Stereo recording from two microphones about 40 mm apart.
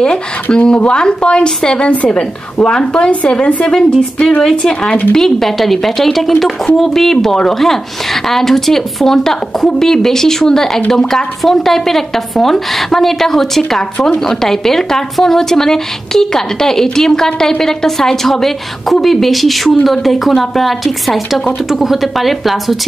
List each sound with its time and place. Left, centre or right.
0.0 s speech: left
4.4 s a woman's voice: centre